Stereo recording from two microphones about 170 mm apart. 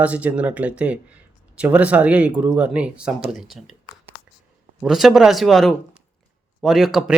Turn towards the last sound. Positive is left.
turn(degrees=0)  # may be behind; listen again after turning